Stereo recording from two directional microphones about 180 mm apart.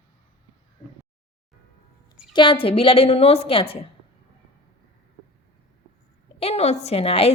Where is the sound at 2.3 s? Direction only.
30° left (ahead or behind).